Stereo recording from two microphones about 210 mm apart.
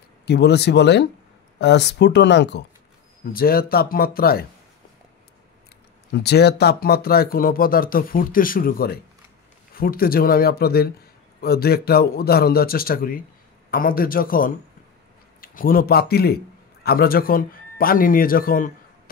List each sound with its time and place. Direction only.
0.2 s speech: 50° left (ahead or behind)
3.3 s speech: 45° left (ahead or behind)
6.1 s a man's voice: 50° left (ahead or behind)